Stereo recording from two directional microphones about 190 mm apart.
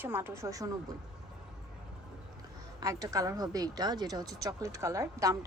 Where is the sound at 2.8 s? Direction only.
15° right (ahead or behind).